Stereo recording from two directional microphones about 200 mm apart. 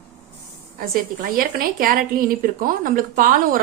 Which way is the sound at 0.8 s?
45° right (ahead or behind).